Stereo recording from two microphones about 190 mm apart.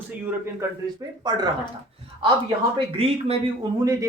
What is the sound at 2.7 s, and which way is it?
Speech, 30° right (ahead or behind).